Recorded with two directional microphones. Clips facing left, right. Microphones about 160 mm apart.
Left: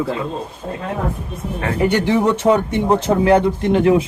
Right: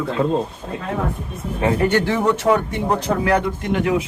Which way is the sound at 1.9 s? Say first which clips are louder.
Left 2 dB; 15° left (ahead or behind).